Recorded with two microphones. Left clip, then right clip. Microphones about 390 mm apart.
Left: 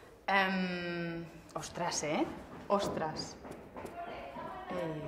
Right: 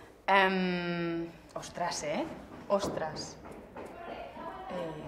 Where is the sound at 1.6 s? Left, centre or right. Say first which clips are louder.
Right 2 dB; left.